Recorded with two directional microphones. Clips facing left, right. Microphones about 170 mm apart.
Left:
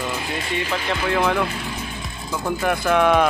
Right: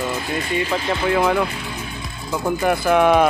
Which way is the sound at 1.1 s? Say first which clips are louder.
Right 2 dB; 5° right (ahead or behind).